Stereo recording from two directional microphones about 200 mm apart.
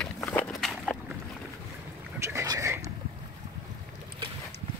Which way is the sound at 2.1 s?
15° right (ahead or behind).